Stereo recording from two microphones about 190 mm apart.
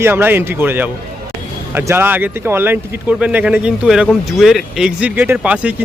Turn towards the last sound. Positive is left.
turn(degrees=-5)  # may be behind; listen again after turning